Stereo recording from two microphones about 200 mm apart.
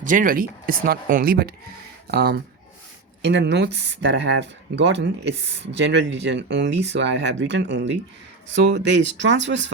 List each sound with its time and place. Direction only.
0.0 s speech: 40° right (ahead or behind); by 9.7 s 65° right (ahead or behind)